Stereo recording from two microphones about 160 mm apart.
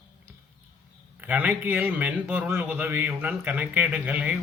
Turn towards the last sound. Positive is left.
turn(degrees=-10)  # may be behind; listen again after turning